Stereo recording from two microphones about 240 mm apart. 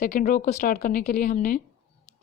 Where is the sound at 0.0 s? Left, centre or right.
Left.